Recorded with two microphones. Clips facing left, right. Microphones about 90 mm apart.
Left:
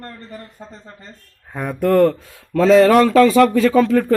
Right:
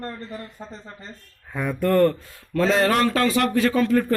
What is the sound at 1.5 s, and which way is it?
Speech, 50° left (ahead or behind).